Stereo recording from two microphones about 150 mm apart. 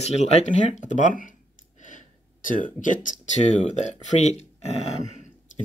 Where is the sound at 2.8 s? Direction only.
55° left (ahead or behind).